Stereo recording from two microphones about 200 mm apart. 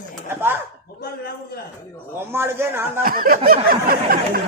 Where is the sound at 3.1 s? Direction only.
45° right (ahead or behind).